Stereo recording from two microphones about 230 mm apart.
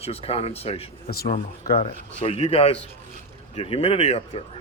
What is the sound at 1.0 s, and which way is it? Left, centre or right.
Speech, left.